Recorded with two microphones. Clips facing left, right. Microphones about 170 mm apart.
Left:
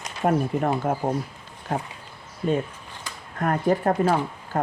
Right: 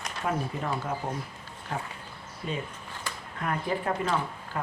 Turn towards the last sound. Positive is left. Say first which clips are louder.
# left 6 dB
turn(degrees=40)  # may be behind; listen again after turning